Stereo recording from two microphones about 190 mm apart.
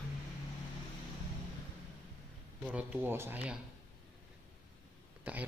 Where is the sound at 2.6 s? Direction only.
5° right (ahead or behind).